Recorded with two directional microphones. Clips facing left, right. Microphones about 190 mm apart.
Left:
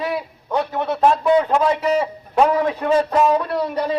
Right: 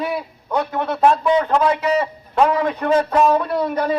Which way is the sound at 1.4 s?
5° left (ahead or behind).